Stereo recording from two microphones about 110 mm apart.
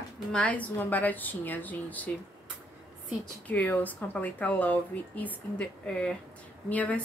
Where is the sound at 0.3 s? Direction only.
10° left (ahead or behind).